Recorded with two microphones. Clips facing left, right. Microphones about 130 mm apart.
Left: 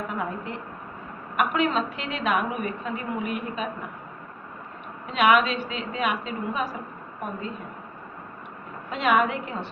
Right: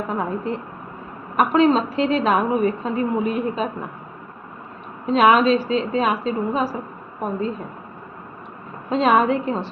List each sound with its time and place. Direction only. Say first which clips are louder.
0.1 s a woman's voice: right 6 dB; 35° right (ahead or behind)
5.0 s a woman's voice: right 5 dB; 35° right (ahead or behind)
8.9 s a woman's voice: right 6 dB; 35° right (ahead or behind)